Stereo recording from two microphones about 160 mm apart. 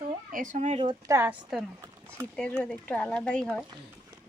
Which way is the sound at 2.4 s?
10° left (ahead or behind).